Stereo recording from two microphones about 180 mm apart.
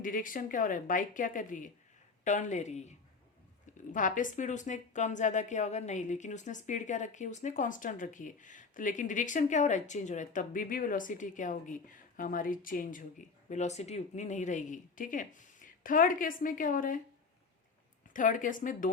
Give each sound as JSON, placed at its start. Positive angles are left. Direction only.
{"t": 0.0, "sound": "a woman's voice", "side_deg": 50}
{"t": 3.9, "sound": "a woman's voice", "side_deg": 45}
{"t": 18.1, "sound": "a woman's voice", "side_deg": 45}